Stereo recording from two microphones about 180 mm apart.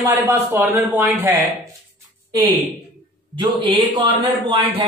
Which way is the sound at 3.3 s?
25° right (ahead or behind).